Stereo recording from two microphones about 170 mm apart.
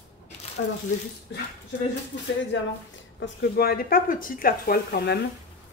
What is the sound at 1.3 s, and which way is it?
Speech, 90° left.